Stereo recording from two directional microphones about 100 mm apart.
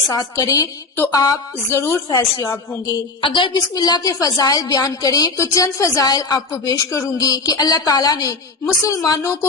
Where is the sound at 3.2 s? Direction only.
55° left (ahead or behind).